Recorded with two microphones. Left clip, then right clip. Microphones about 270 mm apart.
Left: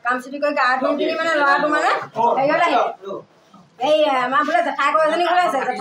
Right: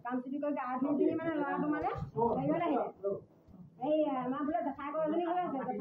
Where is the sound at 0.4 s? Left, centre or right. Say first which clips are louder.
Left 18 dB; right.